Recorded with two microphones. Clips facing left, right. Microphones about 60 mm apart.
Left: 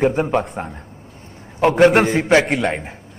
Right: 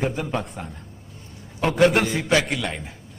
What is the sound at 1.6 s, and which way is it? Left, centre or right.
A man's voice, left.